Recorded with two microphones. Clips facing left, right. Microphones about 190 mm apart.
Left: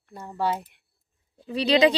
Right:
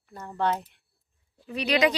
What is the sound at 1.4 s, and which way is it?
Speech, 30° left (ahead or behind).